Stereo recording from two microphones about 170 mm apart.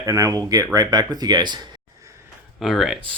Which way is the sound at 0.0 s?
20° right (ahead or behind).